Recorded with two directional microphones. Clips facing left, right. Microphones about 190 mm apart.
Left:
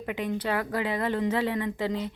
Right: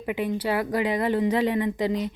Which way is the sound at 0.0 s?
10° right (ahead or behind).